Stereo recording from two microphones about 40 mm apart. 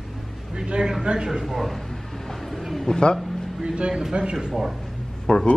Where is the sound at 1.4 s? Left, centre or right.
Centre.